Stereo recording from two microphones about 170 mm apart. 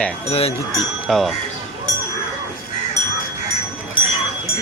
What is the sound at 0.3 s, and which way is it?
Speech, 35° left (ahead or behind).